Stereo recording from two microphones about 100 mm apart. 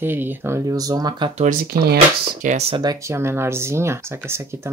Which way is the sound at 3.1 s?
25° right (ahead or behind).